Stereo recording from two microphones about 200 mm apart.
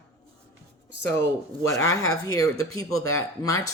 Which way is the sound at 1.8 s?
90° left.